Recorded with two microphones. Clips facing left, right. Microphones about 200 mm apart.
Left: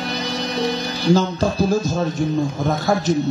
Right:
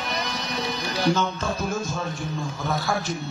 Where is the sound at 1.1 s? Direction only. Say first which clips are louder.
Left 8 dB; 35° left (ahead or behind).